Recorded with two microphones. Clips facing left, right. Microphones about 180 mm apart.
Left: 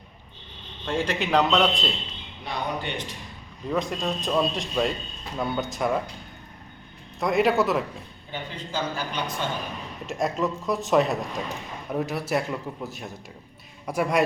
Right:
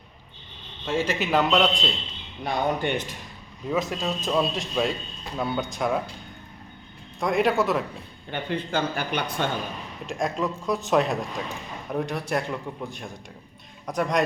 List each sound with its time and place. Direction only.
0.9 s a man's voice: 5° right (ahead or behind)
2.4 s speech: 50° right (ahead or behind)
3.7 s a man's voice: centre (ahead or behind)
7.2 s a man's voice: centre (ahead or behind)
8.3 s speech: 60° right (ahead or behind)
10.1 s a man's voice: centre (ahead or behind)